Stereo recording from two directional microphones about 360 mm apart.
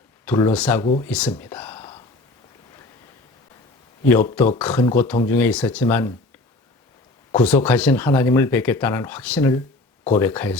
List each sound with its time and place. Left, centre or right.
0.3 s speech: centre
4.5 s speech: centre
7.3 s speech: centre